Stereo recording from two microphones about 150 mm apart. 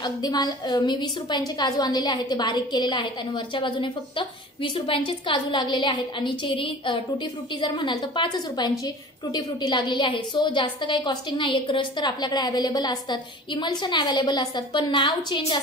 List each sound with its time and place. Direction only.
0.0 s a woman's voice: 25° left (ahead or behind)